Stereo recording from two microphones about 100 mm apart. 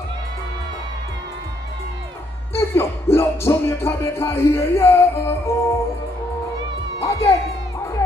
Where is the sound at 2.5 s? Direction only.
25° left (ahead or behind).